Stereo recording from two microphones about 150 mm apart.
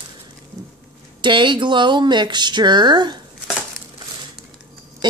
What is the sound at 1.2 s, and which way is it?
Speech, 30° right (ahead or behind).